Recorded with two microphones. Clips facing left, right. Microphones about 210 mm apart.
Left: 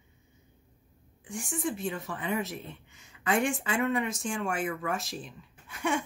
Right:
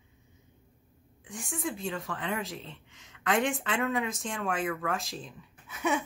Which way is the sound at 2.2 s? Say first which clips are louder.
Left 2 dB; 90° right.